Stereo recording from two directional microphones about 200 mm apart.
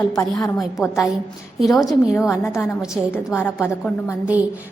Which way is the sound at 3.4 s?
10° left (ahead or behind).